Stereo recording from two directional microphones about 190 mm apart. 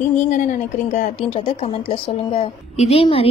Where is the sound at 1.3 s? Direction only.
25° left (ahead or behind).